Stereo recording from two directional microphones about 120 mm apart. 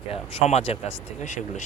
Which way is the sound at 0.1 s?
65° left (ahead or behind).